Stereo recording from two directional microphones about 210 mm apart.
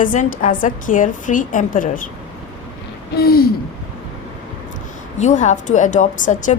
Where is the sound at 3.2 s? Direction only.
45° left (ahead or behind).